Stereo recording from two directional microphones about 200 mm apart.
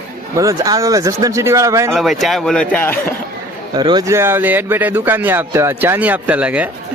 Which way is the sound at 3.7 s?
20° right (ahead or behind).